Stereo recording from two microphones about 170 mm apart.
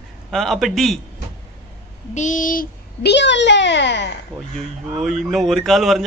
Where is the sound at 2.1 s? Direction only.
45° left (ahead or behind); by 4.1 s 90° left.